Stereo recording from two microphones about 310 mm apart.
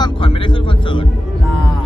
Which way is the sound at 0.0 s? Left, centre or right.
Centre.